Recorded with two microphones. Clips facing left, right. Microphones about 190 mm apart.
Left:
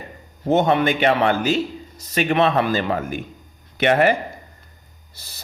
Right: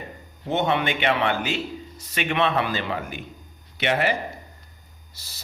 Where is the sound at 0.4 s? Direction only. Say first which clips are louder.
Left 6 dB; 45° left (ahead or behind).